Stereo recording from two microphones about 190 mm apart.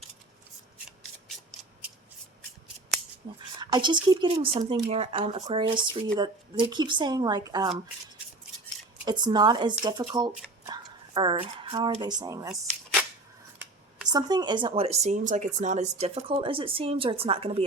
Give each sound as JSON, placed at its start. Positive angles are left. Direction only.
{"t": 3.6, "sound": "speech", "side_deg": -25}
{"t": 9.0, "sound": "speech", "side_deg": -20}
{"t": 14.1, "sound": "speech", "side_deg": -20}